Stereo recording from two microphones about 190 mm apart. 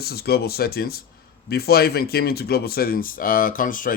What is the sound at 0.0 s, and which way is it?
Speech, 55° left (ahead or behind).